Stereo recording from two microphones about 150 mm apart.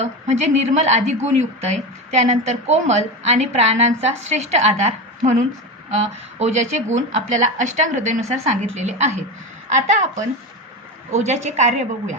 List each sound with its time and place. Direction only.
0.0 s a woman's voice: 50° right (ahead or behind)
11.1 s a woman's voice: 50° right (ahead or behind)